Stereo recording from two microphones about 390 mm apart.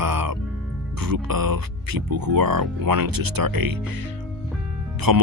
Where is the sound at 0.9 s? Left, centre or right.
Right.